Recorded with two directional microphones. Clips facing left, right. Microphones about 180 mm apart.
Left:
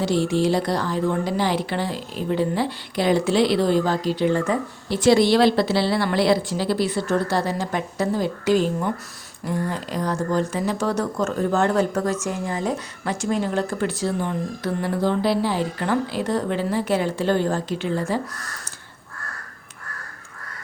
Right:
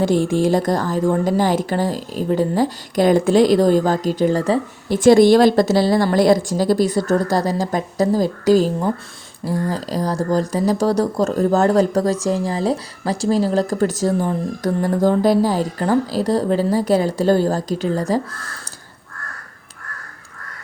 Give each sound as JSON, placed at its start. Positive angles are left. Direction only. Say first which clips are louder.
{"t": 0.0, "sound": "a woman's voice", "louder": "right 4 dB", "side_deg": -50}
{"t": 4.9, "sound": "speech", "louder": "right 6 dB", "side_deg": -50}